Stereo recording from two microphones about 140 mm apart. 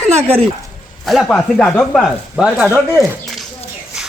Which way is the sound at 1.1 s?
5° left (ahead or behind).